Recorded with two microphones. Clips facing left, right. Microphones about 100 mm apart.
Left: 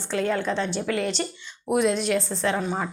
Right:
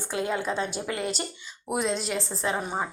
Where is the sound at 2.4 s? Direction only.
10° right (ahead or behind).